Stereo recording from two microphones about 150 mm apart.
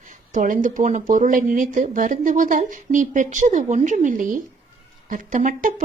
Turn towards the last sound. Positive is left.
turn(degrees=-60)  # may be behind; listen again after turning